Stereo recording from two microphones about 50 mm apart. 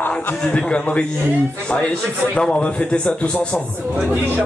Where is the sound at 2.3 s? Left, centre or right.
Left.